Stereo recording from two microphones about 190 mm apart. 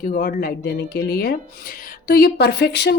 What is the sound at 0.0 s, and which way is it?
A woman's voice, 50° left (ahead or behind).